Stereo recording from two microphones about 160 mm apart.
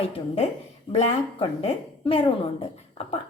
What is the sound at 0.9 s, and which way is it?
A woman's voice, 35° left (ahead or behind).